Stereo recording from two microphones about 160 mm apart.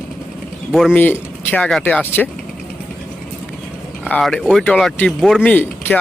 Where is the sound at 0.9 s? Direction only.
10° left (ahead or behind).